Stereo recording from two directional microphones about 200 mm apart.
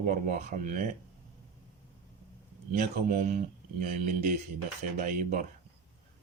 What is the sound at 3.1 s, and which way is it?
Speech, 45° right (ahead or behind).